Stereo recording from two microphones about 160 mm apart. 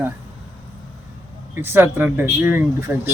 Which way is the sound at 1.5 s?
15° right (ahead or behind).